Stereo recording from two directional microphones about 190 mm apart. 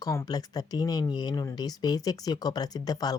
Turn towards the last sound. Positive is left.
turn(degrees=20)  # may be behind; listen again after turning